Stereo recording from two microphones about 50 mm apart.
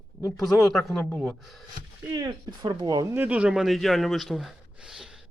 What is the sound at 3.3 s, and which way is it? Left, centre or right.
Speech, right.